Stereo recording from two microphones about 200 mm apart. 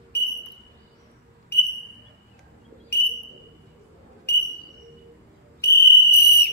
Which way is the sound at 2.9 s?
55° left (ahead or behind).